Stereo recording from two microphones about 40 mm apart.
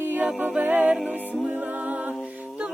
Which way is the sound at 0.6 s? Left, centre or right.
Right.